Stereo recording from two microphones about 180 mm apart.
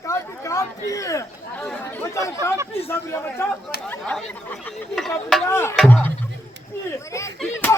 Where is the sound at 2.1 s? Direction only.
15° left (ahead or behind).